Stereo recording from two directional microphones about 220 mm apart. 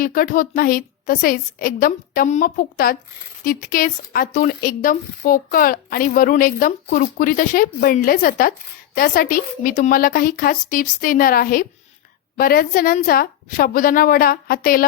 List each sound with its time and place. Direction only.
0.0 s speech: 40° left (ahead or behind)